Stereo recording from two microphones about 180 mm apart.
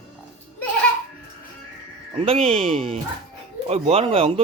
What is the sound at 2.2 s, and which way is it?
Speech, 30° right (ahead or behind).